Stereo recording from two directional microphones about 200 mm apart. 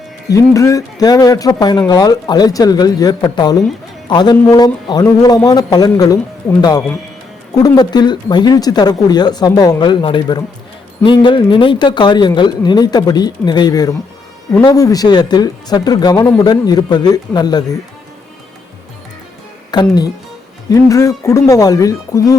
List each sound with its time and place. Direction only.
0.3 s speech: 15° left (ahead or behind)
19.7 s speech: 20° left (ahead or behind)